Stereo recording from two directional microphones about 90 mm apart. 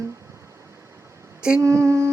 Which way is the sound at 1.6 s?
35° right (ahead or behind).